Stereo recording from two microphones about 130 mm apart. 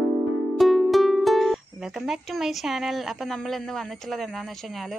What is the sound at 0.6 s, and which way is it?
Speech, centre (ahead or behind).